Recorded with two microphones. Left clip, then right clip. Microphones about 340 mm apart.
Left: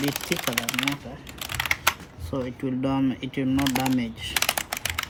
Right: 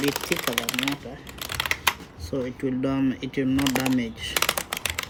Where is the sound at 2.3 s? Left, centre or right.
Centre.